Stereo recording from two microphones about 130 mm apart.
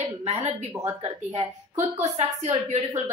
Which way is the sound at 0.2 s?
50° right (ahead or behind).